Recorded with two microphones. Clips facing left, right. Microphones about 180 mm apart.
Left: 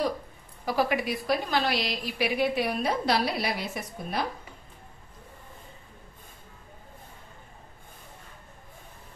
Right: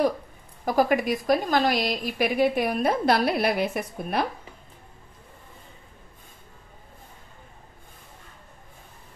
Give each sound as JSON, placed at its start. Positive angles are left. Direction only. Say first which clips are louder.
{"t": 0.7, "sound": "a woman's voice", "louder": "right 5 dB", "side_deg": -45}